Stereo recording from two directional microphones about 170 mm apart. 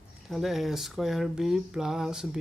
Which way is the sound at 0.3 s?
Centre (ahead or behind).